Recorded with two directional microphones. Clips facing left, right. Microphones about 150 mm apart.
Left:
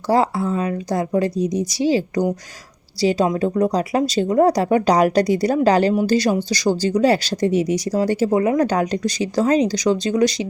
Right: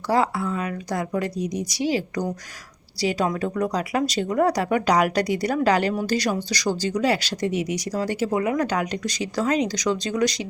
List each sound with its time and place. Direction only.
0.1 s speech: 30° left (ahead or behind)